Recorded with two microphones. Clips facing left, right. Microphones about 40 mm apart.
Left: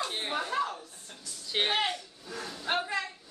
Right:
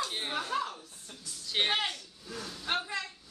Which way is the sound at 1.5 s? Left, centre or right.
Centre.